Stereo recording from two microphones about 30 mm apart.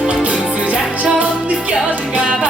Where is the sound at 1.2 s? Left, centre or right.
Right.